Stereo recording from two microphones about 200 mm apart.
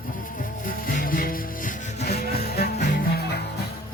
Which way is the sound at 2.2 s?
50° left (ahead or behind).